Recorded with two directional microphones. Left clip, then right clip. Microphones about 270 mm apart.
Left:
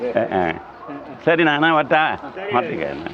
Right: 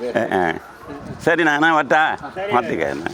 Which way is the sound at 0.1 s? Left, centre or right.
Right.